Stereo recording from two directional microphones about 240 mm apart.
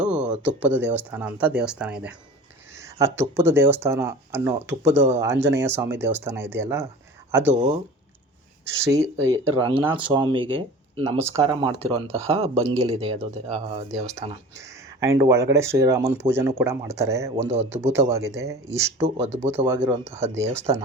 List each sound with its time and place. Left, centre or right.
0.0 s speech: centre
7.5 s speech: right
8.8 s speech: centre
11.2 s speech: centre
14.6 s speech: centre
17.3 s speech: right
17.7 s speech: centre
19.0 s speech: right
19.6 s speech: centre